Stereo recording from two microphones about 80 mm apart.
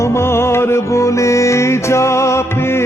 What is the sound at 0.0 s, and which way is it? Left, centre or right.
Music, left.